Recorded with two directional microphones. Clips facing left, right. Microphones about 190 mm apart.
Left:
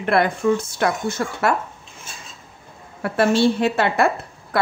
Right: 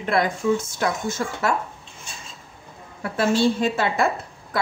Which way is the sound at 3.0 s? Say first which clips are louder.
Left 3 dB; 65° left (ahead or behind).